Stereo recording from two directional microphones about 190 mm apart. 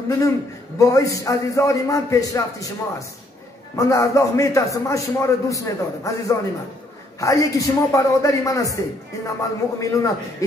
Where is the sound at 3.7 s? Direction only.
15° left (ahead or behind).